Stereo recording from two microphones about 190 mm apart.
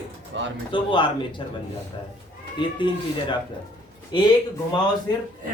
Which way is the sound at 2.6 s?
25° left (ahead or behind).